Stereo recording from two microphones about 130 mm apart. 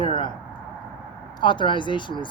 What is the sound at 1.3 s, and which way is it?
Speech, 35° left (ahead or behind).